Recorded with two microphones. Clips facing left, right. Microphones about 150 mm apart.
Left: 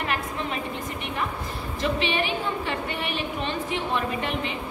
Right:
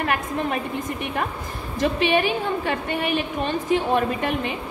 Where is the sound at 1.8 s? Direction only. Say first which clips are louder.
Right 6 dB; 45° right (ahead or behind).